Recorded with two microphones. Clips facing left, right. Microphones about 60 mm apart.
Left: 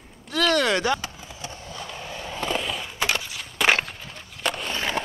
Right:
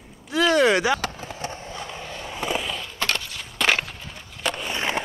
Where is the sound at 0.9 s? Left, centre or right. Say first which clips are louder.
Right 3 dB; right.